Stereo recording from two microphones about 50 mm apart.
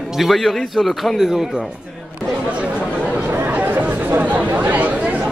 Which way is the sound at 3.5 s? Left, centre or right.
Right.